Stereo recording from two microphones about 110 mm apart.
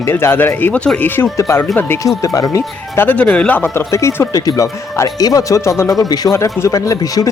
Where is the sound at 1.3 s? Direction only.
30° left (ahead or behind).